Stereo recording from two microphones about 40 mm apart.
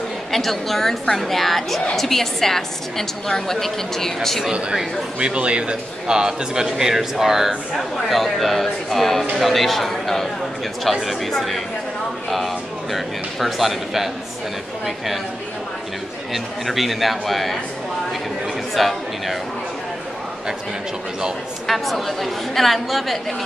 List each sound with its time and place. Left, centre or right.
0.3 s a woman's voice: centre
5.2 s a man's voice: right; by 14.1 s centre
16.3 s speech: centre
18.8 s speech: centre
21.6 s speech: centre